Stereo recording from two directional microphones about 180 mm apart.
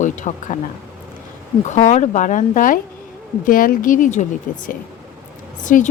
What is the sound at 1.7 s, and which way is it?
Speech, 40° left (ahead or behind).